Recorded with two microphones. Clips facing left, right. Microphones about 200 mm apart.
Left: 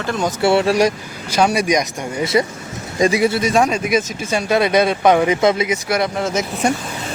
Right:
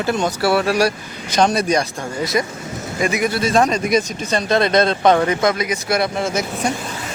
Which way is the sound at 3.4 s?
15° left (ahead or behind).